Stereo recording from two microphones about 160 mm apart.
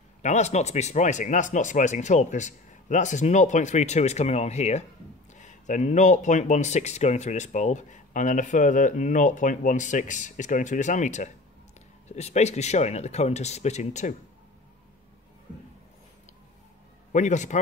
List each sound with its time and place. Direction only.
0.2 s speech: 45° left (ahead or behind)
17.1 s speech: 50° left (ahead or behind)